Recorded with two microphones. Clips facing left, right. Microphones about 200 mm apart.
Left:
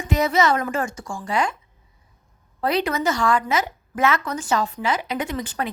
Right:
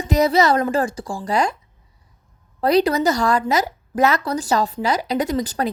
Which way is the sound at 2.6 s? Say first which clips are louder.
Right 6 dB; 40° right (ahead or behind).